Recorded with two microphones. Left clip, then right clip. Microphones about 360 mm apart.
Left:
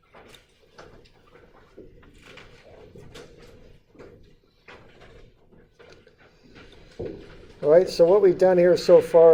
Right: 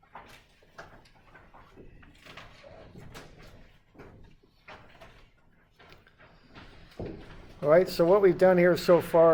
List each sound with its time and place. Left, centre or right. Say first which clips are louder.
7.6 s speech: left 5 dB; right